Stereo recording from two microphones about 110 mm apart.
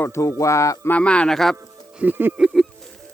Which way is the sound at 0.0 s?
25° left (ahead or behind).